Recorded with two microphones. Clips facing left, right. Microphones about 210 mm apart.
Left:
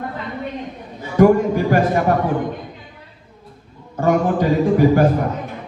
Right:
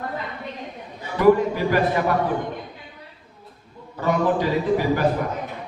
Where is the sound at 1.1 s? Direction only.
45° left (ahead or behind).